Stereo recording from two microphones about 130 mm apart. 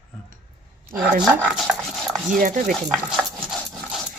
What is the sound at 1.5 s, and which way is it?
Dog, centre (ahead or behind).